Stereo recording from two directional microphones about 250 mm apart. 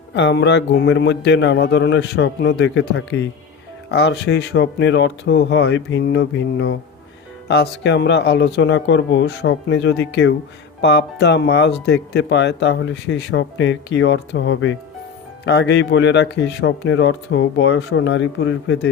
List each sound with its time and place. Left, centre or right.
0.1 s speech: left